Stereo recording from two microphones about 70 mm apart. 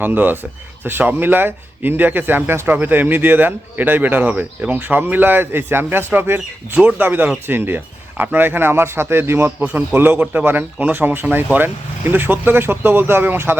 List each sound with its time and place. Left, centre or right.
0.0 s speech: right